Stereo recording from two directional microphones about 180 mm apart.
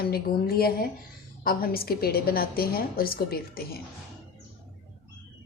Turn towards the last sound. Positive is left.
turn(degrees=55)  # may be behind; listen again after turning